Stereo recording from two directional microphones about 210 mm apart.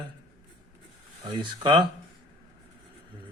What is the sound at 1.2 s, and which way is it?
Speech, 25° right (ahead or behind).